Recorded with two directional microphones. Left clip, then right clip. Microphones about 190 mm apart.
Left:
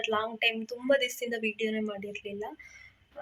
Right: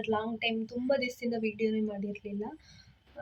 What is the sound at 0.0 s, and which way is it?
Speech, centre (ahead or behind).